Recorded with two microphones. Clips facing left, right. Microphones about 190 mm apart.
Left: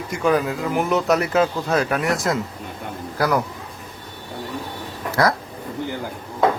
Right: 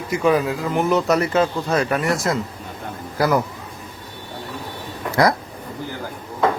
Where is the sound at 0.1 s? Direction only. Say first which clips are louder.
Right 2 dB; centre (ahead or behind).